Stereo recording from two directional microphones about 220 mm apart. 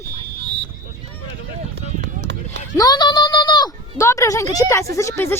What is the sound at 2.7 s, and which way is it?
Speech, 20° left (ahead or behind).